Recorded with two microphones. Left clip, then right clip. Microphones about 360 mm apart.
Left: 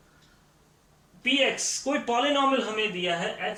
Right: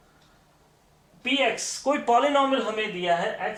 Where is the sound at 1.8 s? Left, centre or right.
Right.